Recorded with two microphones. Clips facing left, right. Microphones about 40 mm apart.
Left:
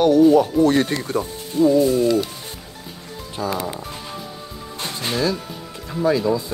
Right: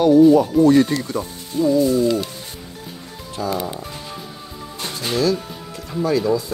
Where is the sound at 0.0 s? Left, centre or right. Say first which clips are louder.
Right 2 dB; left.